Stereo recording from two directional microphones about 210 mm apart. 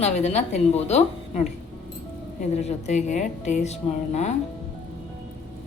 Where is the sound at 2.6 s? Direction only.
30° left (ahead or behind).